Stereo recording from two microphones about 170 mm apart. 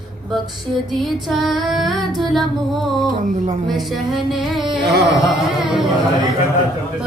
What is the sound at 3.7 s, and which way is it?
Female singing, centre (ahead or behind).